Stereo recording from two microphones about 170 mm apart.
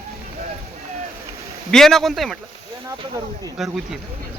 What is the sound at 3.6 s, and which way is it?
Speech, centre (ahead or behind).